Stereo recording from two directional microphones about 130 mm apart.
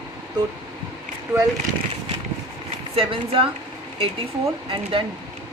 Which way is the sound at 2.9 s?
45° right (ahead or behind).